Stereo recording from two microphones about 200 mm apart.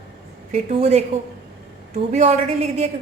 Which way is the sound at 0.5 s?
35° right (ahead or behind).